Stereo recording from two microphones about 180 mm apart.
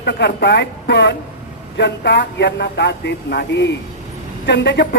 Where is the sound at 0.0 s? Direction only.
70° left (ahead or behind).